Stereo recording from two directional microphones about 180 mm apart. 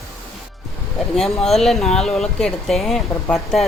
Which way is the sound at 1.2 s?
Centre (ahead or behind).